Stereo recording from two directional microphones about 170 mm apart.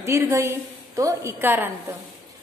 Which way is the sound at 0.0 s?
15° right (ahead or behind).